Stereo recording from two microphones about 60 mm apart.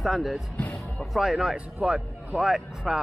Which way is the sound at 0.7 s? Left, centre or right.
Centre.